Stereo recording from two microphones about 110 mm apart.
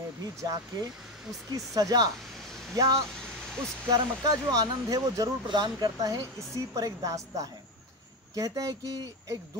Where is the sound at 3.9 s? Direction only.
35° right (ahead or behind).